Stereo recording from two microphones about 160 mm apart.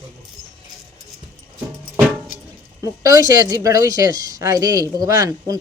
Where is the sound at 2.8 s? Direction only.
20° right (ahead or behind).